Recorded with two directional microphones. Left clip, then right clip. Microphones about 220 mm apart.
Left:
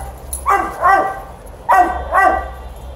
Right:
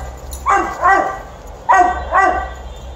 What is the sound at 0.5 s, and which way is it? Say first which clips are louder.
Bow-wow: even; 45° left (ahead or behind).